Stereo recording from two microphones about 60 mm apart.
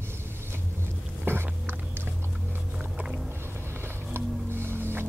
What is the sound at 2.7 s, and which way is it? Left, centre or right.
Music, centre.